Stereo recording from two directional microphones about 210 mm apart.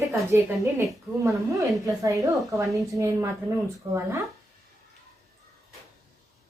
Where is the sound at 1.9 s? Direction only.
15° right (ahead or behind).